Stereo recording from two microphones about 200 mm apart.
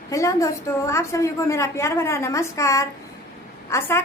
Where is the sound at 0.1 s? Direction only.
15° left (ahead or behind).